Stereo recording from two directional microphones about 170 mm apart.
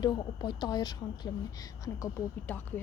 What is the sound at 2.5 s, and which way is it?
Speech, 10° left (ahead or behind).